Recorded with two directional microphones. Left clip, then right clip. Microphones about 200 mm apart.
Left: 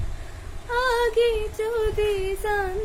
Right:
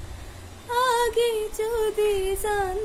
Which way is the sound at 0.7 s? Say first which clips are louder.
Even; 20° right (ahead or behind).